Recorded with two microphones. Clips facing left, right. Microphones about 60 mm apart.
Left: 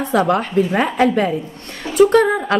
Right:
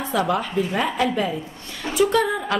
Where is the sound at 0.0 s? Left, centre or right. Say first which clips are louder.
Left 6 dB; left.